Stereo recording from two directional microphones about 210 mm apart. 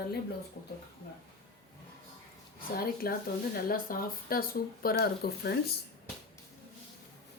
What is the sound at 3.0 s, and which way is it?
Speech, 45° left (ahead or behind).